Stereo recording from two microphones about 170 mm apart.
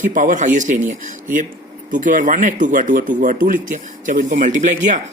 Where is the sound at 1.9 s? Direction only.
50° right (ahead or behind).